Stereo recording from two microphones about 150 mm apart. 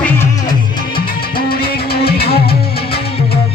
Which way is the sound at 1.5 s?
90° left.